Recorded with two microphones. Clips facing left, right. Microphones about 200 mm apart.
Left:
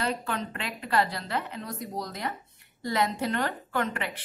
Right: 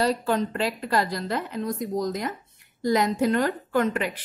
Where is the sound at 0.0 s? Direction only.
35° right (ahead or behind).